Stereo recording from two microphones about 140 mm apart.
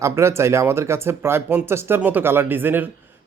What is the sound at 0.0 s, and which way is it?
Speech, 20° right (ahead or behind).